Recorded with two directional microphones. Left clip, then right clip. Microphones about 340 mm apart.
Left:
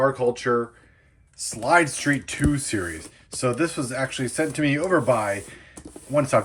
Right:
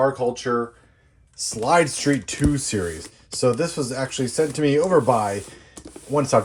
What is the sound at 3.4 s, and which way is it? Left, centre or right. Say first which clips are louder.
Speech: right 3 dB; centre.